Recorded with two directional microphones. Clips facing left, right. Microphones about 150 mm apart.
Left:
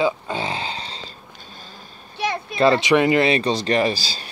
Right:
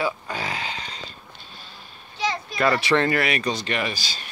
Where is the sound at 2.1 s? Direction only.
60° left (ahead or behind).